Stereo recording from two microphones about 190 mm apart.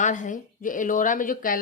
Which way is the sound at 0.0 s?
40° left (ahead or behind).